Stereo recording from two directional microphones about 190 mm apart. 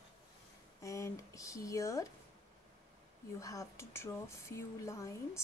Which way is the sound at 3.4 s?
15° left (ahead or behind).